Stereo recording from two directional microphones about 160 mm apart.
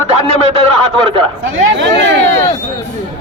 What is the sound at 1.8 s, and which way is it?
Speech, 90° right.